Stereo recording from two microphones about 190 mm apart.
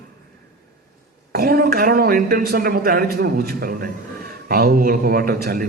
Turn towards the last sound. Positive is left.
turn(degrees=-50)  # may be behind; listen again after turning